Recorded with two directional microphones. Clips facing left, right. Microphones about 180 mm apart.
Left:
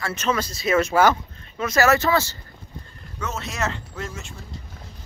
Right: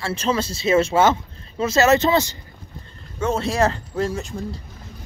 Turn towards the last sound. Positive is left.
turn(degrees=-35)  # may be behind; listen again after turning